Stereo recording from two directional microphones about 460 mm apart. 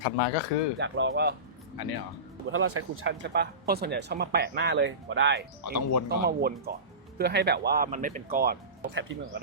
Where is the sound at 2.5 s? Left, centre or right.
Right.